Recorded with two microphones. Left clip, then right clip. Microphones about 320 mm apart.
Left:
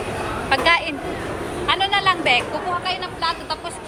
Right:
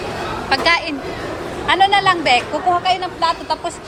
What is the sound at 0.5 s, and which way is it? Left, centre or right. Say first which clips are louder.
Speech: right 2 dB; centre.